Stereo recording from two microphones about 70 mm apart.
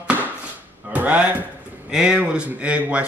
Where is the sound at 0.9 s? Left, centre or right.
Right.